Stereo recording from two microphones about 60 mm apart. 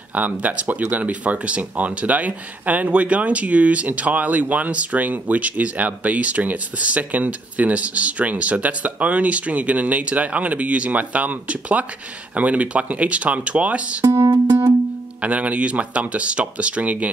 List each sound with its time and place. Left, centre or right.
0.1 s speech: right
14.0 s speech: right
15.2 s speech: right